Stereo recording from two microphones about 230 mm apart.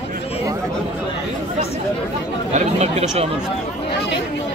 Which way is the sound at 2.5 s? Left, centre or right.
Right.